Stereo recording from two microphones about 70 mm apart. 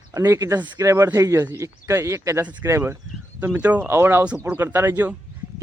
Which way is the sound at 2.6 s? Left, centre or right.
Right.